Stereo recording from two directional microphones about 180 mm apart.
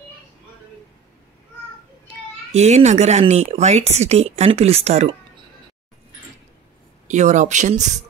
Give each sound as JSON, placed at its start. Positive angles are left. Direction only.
{"t": 2.5, "sound": "speech", "side_deg": -40}
{"t": 7.1, "sound": "speech", "side_deg": -40}